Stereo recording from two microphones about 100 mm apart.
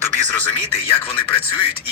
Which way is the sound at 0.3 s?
20° left (ahead or behind).